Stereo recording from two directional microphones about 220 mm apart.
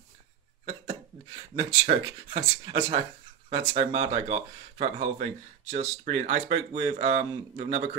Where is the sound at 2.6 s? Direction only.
20° right (ahead or behind).